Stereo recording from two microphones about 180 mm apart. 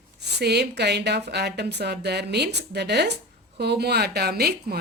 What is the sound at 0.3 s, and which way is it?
Speech, 70° right (ahead or behind).